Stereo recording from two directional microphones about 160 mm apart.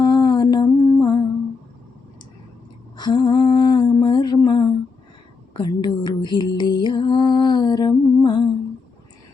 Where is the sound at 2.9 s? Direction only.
25° left (ahead or behind).